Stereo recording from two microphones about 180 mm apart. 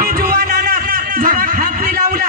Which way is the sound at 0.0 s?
55° right (ahead or behind).